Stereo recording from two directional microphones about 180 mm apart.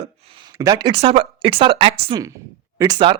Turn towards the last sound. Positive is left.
turn(degrees=-25)  # may be behind; listen again after turning